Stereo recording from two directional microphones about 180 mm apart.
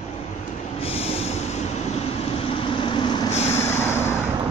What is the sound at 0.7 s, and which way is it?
Train, 35° left (ahead or behind).